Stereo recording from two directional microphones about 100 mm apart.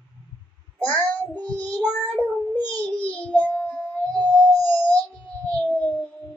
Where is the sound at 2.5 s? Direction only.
15° left (ahead or behind).